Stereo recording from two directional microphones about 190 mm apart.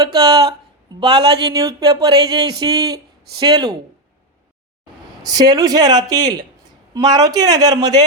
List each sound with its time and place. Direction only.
0.0 s speech: 20° right (ahead or behind)
5.2 s speech: 20° right (ahead or behind)